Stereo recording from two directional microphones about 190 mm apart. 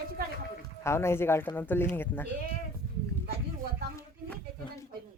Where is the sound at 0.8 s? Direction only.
15° left (ahead or behind).